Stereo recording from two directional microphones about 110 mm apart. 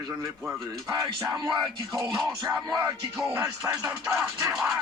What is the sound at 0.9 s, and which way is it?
Music, 30° right (ahead or behind).